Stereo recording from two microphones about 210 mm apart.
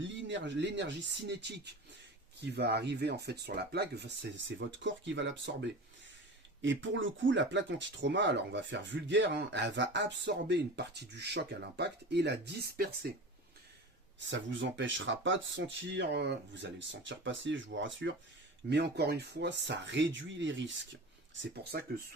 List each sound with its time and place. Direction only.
0.0 s speech: 60° right (ahead or behind)
14.2 s speech: 60° right (ahead or behind)
21.5 s speech: 50° right (ahead or behind)